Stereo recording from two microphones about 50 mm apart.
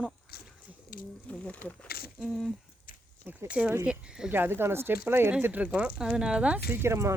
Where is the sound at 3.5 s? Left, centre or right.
Right.